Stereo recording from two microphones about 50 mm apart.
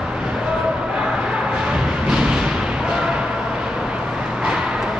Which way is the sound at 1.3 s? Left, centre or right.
Centre.